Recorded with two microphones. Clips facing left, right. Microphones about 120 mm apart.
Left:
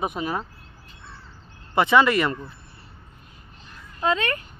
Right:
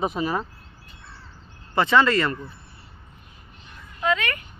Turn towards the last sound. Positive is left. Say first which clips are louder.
# left 1 dB
turn(degrees=30)  # may be behind; listen again after turning